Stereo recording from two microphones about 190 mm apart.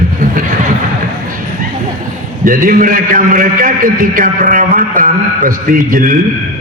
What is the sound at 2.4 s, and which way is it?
A man's voice, 45° right (ahead or behind).